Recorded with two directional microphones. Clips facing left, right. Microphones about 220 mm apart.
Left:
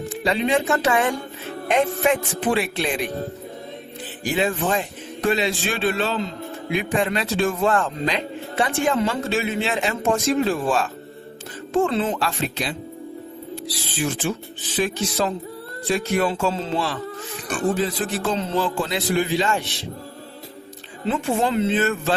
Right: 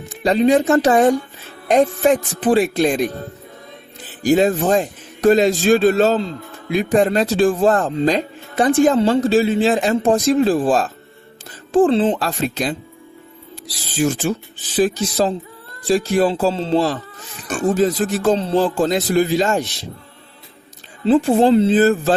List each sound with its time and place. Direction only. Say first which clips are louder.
0.1 s a man's voice: right 7 dB; 40° right (ahead or behind)
4.2 s a man's voice: right 8 dB; 40° right (ahead or behind)
14.0 s a man's voice: right 6 dB; 45° right (ahead or behind)
21.1 s a man's voice: right 9 dB; 35° right (ahead or behind)